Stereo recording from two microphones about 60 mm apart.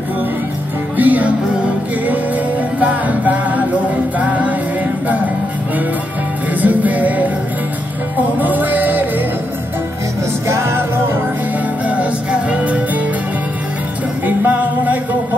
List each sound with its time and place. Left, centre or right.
0.9 s music: right
6.6 s music: right
8.4 s music: right
10.5 s music: right
11.9 s music: centre
14.2 s music: right